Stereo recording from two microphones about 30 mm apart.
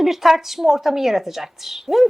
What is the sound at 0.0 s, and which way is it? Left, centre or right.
A woman's voice, centre.